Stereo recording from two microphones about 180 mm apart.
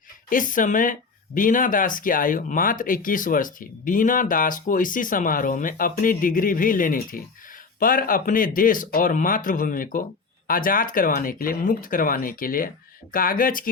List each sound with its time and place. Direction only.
0.3 s speech: 50° left (ahead or behind)